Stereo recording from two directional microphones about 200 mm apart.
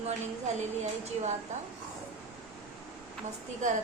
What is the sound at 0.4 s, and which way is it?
Speech, 35° right (ahead or behind).